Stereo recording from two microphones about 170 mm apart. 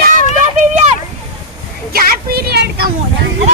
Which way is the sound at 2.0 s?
70° right (ahead or behind).